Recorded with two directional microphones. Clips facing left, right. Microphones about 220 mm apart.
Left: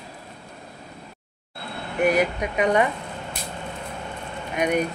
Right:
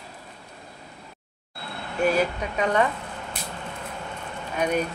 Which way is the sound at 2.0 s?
15° left (ahead or behind).